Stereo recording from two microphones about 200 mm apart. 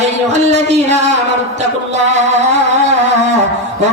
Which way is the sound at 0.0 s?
35° right (ahead or behind).